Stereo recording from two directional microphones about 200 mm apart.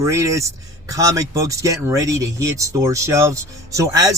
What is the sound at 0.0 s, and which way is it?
Speech, 15° right (ahead or behind).